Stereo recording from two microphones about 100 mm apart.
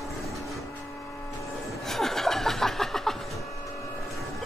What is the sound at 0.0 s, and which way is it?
Vehicle, centre (ahead or behind).